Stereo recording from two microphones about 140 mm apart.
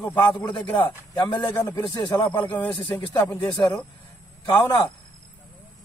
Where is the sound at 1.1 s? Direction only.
30° left (ahead or behind).